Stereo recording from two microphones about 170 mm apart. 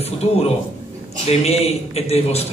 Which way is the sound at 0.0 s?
35° left (ahead or behind).